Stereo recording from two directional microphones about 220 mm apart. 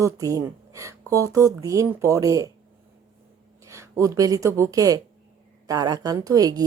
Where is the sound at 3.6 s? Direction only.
15° right (ahead or behind).